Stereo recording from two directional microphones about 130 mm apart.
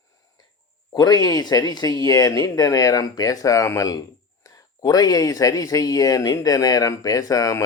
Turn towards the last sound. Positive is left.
turn(degrees=25)  # may be behind; listen again after turning